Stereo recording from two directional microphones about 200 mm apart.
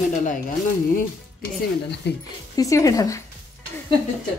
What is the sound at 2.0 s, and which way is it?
Speech, 60° left (ahead or behind).